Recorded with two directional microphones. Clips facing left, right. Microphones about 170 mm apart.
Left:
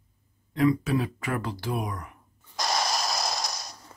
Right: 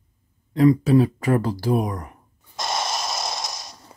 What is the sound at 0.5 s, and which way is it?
Speech, 35° right (ahead or behind).